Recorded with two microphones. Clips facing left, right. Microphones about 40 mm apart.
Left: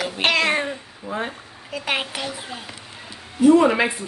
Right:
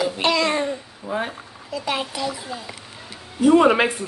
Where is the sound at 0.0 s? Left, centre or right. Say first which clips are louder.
Even; left.